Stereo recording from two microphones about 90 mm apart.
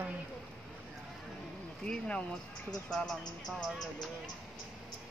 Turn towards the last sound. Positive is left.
turn(degrees=5)  # may be behind; listen again after turning